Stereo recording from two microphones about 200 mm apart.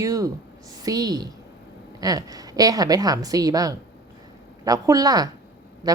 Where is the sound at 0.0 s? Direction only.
15° right (ahead or behind).